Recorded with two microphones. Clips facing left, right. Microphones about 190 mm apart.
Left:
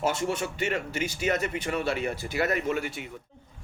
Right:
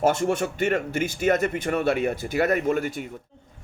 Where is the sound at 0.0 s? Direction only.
50° right (ahead or behind).